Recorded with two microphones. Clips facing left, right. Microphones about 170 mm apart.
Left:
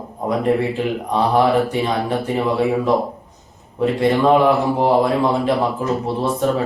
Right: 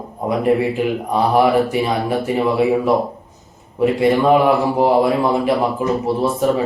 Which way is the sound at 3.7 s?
10° right (ahead or behind).